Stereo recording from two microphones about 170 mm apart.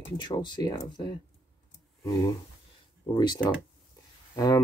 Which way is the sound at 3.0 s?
25° left (ahead or behind).